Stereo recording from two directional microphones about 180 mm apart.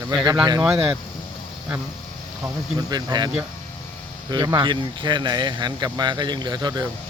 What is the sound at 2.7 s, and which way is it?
Speech, 25° right (ahead or behind).